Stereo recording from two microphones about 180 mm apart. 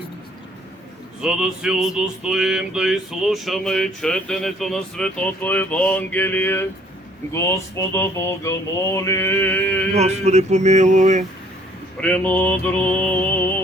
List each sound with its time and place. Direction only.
1.2 s a sound: 5° right (ahead or behind); by 6.7 s 10° left (ahead or behind)
7.3 s mantra: 15° left (ahead or behind)
9.9 s speech: 35° right (ahead or behind)
11.9 s mantra: 5° left (ahead or behind)